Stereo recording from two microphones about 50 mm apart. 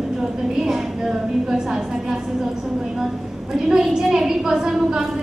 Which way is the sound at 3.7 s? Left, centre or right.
Centre.